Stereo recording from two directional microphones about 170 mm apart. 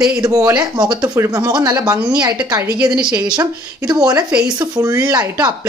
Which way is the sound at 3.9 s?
20° right (ahead or behind).